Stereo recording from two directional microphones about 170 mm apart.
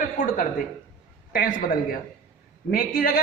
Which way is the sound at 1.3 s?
55° left (ahead or behind).